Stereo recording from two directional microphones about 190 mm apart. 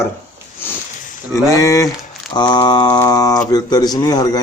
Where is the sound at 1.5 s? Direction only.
15° left (ahead or behind).